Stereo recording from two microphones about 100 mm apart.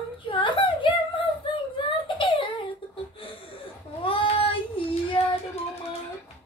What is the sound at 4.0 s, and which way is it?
Child singing, 60° left (ahead or behind).